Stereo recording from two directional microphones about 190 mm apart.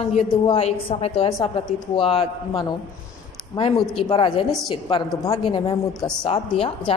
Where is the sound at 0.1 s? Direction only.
35° left (ahead or behind).